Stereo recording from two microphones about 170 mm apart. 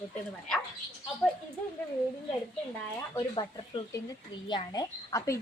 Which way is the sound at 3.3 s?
25° left (ahead or behind).